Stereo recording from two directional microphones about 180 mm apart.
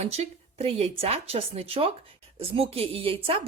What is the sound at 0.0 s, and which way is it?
A woman's voice, 35° right (ahead or behind).